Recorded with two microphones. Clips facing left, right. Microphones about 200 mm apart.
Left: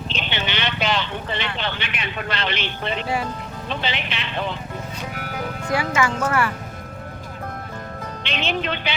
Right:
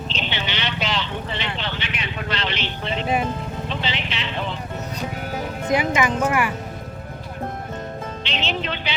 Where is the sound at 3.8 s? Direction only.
55° left (ahead or behind).